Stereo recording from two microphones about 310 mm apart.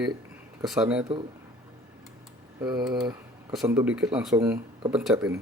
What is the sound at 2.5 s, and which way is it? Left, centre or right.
Speech, centre.